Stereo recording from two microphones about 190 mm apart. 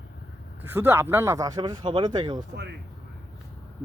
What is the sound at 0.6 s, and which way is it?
Speech, 10° right (ahead or behind).